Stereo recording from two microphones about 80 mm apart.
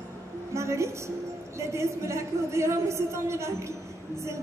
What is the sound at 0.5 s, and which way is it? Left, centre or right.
Speech, right.